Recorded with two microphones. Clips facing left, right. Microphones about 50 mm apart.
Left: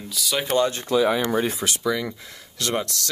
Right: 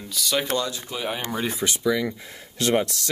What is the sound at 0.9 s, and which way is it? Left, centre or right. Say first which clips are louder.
Speech: left 15 dB; left.